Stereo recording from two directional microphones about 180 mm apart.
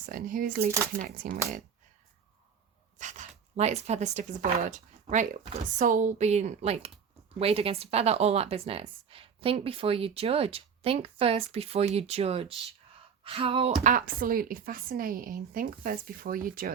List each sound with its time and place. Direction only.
0.0 s a woman's voice: 50° right (ahead or behind)
3.0 s speech: 45° right (ahead or behind)
13.8 s a woman's voice: 50° right (ahead or behind)